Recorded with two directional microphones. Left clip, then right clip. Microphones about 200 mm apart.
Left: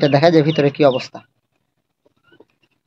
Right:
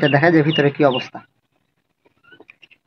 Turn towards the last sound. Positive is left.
turn(degrees=30)  # may be behind; listen again after turning